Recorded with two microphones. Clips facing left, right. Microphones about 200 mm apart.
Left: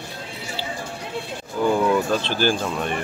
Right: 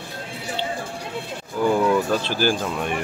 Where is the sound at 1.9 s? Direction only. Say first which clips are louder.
Even; 10° right (ahead or behind).